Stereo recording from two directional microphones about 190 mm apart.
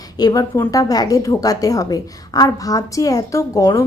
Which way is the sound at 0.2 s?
20° left (ahead or behind).